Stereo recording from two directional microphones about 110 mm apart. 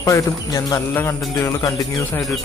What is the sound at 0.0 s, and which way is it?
Speech, 30° left (ahead or behind).